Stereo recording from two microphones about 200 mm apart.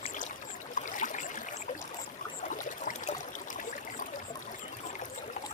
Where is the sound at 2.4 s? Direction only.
40° left (ahead or behind).